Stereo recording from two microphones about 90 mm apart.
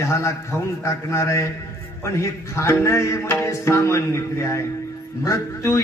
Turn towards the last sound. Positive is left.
turn(degrees=35)  # may be behind; listen again after turning